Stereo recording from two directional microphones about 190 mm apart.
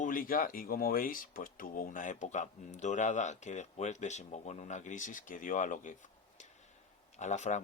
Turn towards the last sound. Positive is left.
turn(degrees=40)  # may be behind; listen again after turning